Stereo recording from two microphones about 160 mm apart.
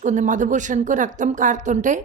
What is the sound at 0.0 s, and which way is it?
A woman's voice, 50° right (ahead or behind).